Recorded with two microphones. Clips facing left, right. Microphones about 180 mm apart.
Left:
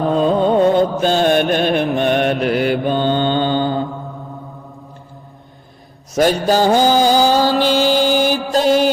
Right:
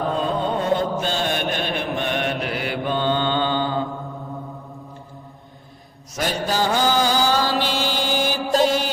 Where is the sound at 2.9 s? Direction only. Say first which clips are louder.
Left 5 dB; 25° left (ahead or behind).